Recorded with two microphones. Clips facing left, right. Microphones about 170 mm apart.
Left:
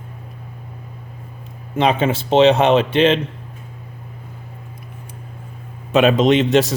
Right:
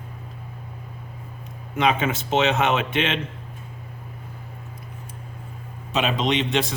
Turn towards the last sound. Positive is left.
turn(degrees=40)  # may be behind; listen again after turning